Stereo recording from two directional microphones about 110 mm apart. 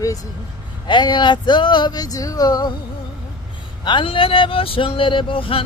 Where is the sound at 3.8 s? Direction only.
45° left (ahead or behind).